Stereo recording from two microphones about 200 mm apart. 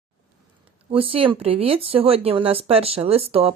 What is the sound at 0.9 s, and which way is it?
Speech, 30° right (ahead or behind).